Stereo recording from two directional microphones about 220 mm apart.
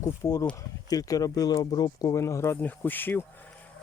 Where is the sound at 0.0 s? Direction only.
15° left (ahead or behind).